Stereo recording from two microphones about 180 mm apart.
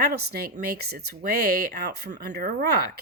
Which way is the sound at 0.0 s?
60° right (ahead or behind).